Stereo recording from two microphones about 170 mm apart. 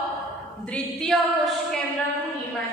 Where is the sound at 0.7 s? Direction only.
5° left (ahead or behind).